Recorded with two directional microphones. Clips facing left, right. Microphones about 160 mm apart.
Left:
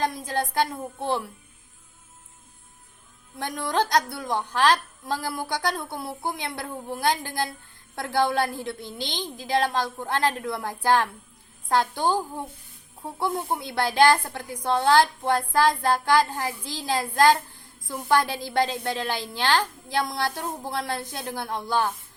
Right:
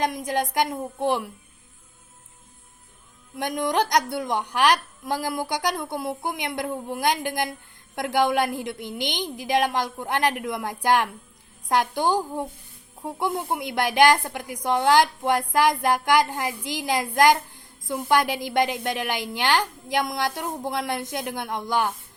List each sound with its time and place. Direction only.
0.0 s a woman's voice: 20° right (ahead or behind)
3.3 s a woman's voice: 20° right (ahead or behind)